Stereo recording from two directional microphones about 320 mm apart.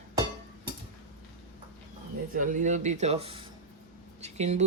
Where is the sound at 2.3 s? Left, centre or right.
Right.